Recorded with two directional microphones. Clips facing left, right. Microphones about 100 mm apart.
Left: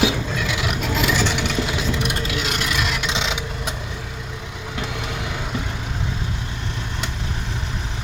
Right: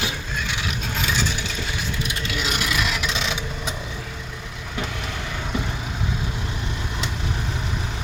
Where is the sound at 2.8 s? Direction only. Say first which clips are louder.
Left 1 dB; centre (ahead or behind).